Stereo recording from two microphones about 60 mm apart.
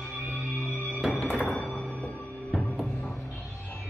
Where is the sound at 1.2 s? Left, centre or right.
Centre.